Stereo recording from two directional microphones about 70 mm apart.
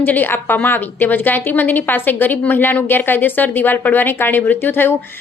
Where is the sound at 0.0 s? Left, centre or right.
Left.